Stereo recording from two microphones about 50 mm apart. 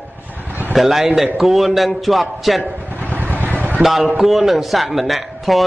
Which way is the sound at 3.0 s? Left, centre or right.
Right.